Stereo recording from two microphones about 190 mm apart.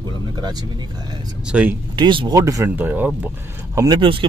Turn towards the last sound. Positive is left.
turn(degrees=-25)  # may be behind; listen again after turning